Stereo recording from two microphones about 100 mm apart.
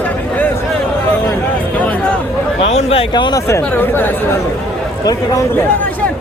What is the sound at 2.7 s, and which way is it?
Speech, 85° left.